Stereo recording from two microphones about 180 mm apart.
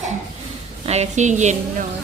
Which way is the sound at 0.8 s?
35° right (ahead or behind).